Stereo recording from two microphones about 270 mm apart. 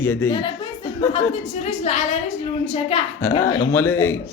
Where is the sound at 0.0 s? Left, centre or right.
Centre.